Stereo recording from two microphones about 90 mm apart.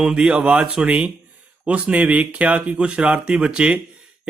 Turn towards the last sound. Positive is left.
turn(degrees=-10)  # may be behind; listen again after turning